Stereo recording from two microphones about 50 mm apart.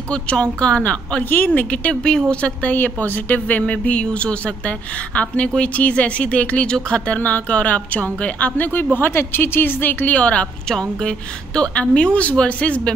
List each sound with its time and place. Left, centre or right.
0.1 s a woman's voice: left
1.3 s a woman's voice: left; by 2.5 s centre
2.6 s a woman's voice: left
7.2 s a woman's voice: left
10.7 s a woman's voice: centre